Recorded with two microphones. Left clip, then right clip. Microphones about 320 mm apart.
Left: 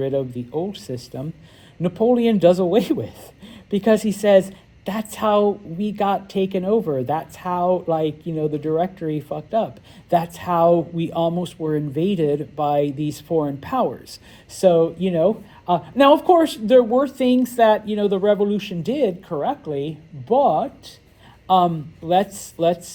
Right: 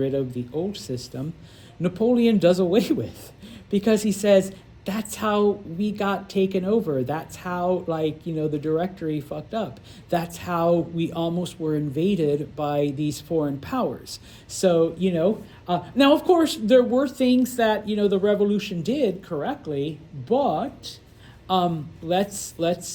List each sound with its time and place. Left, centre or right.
0.0 s speech: centre